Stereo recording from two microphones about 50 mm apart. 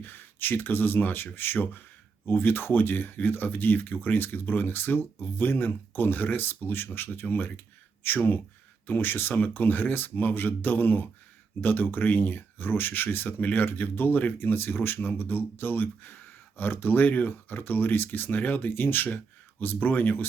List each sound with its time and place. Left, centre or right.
0.0 s speech: left